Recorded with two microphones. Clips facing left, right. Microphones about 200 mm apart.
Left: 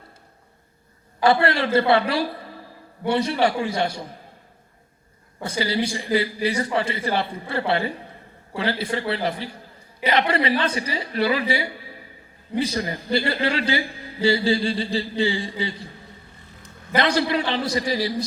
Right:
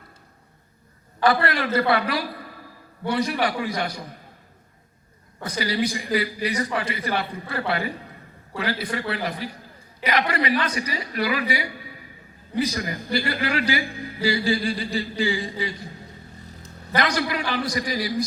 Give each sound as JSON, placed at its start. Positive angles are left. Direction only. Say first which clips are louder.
{"t": 1.2, "sound": "a man's voice", "louder": "left 2 dB", "side_deg": 25}
{"t": 5.4, "sound": "a man's voice", "louder": "left 1 dB", "side_deg": 25}
{"t": 16.9, "sound": "a man's voice", "louder": "left 3 dB", "side_deg": 25}